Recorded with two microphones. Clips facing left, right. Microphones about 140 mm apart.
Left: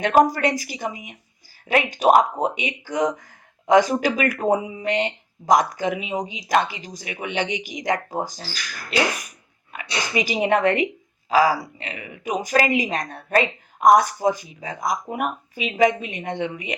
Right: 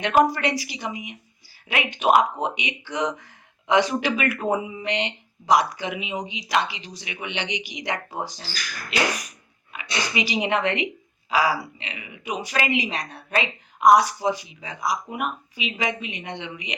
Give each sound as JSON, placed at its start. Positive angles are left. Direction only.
{"t": 0.0, "sound": "a woman's voice", "side_deg": 40}
{"t": 9.7, "sound": "a woman's voice", "side_deg": 45}